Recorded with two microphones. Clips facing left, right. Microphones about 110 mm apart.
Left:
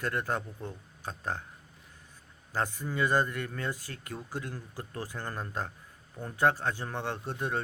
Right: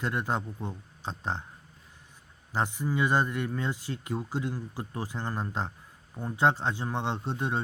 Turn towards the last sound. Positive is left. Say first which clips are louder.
# right 2 dB
turn(degrees=-20)  # may be behind; listen again after turning